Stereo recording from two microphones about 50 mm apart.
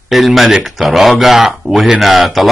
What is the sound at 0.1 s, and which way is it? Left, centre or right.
Speech, centre.